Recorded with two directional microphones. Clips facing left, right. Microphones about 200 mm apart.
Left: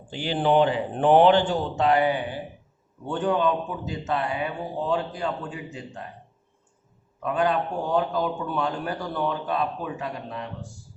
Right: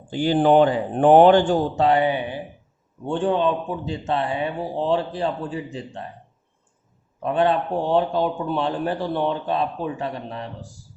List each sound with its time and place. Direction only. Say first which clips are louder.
0.1 s speech: right 6 dB; 45° right (ahead or behind)
1.8 s speech: left 1 dB; 25° right (ahead or behind)
7.2 s speech: right 4 dB; 30° right (ahead or behind)